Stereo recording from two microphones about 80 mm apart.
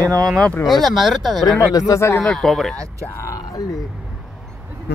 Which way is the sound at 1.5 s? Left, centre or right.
Left.